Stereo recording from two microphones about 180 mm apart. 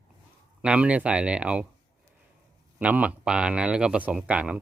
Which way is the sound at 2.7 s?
10° right (ahead or behind).